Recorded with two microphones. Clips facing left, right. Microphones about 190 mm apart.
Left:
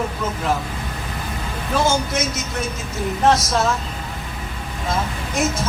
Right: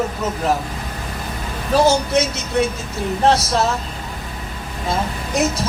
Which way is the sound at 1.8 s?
35° right (ahead or behind).